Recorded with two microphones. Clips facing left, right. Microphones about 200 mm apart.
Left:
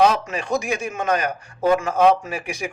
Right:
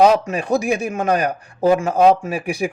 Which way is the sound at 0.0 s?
35° right (ahead or behind).